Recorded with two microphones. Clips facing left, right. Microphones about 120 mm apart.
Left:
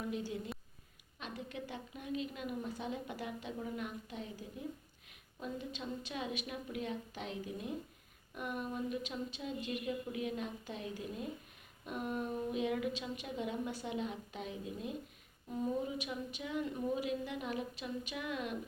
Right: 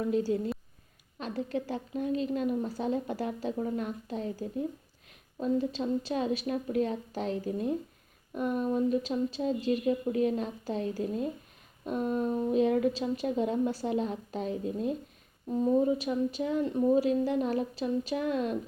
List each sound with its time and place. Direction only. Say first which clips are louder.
0.1 s a woman's voice: right 12 dB; 35° right (ahead or behind)